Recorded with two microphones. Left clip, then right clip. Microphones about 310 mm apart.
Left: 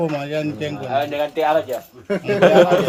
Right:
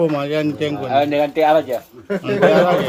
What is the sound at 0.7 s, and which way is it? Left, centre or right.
Speech, right.